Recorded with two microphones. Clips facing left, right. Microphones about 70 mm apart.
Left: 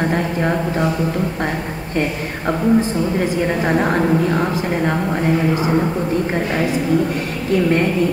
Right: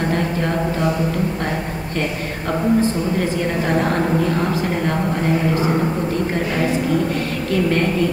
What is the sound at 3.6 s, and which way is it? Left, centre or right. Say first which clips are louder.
Speech: left 1 dB; centre.